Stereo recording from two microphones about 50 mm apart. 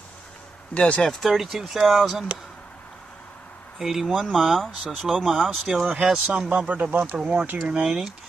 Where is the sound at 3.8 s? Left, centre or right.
Centre.